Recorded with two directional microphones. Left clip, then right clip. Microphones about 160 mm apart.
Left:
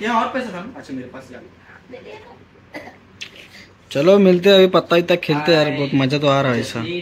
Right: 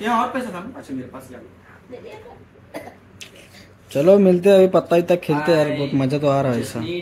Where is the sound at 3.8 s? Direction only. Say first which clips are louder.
Left 1 dB; 10° right (ahead or behind).